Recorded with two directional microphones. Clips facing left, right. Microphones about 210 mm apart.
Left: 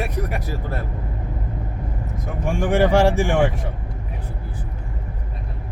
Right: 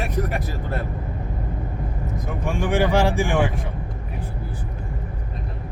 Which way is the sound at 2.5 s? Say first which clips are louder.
Left 3 dB; 45° left (ahead or behind).